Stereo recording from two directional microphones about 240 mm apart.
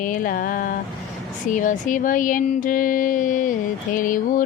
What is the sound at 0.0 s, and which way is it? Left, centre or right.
Speech, left.